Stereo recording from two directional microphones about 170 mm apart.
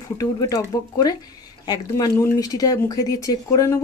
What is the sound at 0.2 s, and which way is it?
Speech, 20° left (ahead or behind).